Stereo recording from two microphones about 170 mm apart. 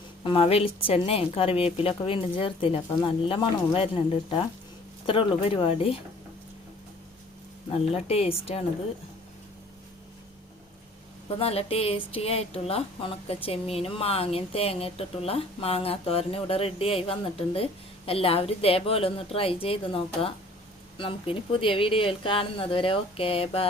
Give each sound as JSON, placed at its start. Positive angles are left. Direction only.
{"t": 0.3, "sound": "speech", "side_deg": 35}
{"t": 7.7, "sound": "speech", "side_deg": 35}
{"t": 11.3, "sound": "speech", "side_deg": 35}